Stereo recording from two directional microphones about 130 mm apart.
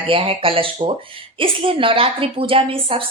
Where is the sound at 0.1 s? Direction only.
45° right (ahead or behind).